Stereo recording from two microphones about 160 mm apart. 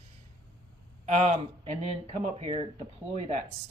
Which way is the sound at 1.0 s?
45° right (ahead or behind).